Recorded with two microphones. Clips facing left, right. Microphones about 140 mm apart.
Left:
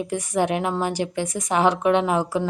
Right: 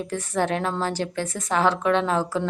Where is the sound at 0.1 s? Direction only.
15° left (ahead or behind).